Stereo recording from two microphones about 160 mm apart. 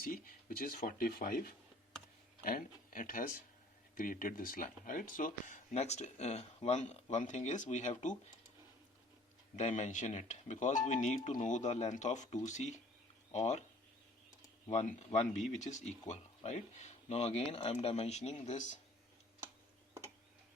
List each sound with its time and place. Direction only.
0.0 s speech: 65° left (ahead or behind)
5.7 s speech: 45° left (ahead or behind)
9.6 s speech: 45° left (ahead or behind)
14.7 s speech: 45° left (ahead or behind)